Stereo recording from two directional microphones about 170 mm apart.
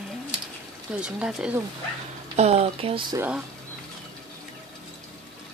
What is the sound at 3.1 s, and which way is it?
Speech, 10° right (ahead or behind).